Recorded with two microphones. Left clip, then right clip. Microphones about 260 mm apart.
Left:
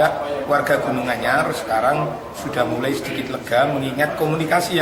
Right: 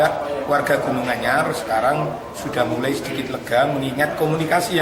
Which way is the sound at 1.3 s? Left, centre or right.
Centre.